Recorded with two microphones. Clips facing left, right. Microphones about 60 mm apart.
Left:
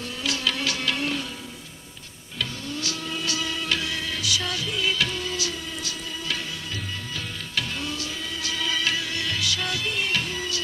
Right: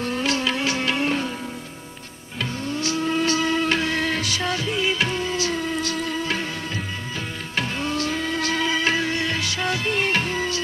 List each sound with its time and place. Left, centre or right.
0.0 s music: right
0.4 s music: right
2.4 s music: right
7.5 s music: right